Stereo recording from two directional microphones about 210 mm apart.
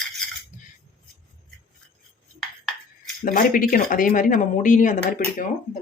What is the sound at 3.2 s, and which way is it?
Speech, 40° left (ahead or behind).